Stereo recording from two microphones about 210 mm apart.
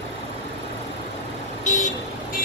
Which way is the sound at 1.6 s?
35° left (ahead or behind).